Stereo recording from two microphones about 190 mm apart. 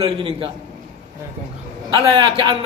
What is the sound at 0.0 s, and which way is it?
Speech, 30° right (ahead or behind).